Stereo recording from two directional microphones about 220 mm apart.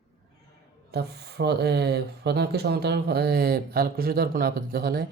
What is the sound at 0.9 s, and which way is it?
Speech, 50° right (ahead or behind).